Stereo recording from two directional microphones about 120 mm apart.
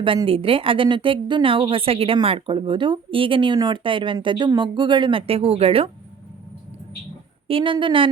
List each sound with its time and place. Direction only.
0.3 s speech: 50° right (ahead or behind)
7.4 s speech: 45° right (ahead or behind)